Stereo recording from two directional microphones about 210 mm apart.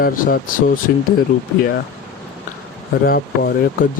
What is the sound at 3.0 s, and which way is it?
Speech, 45° left (ahead or behind).